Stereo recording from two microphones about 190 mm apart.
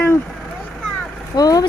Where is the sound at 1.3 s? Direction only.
20° left (ahead or behind).